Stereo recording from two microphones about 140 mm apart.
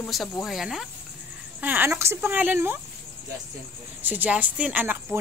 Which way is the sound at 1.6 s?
15° right (ahead or behind).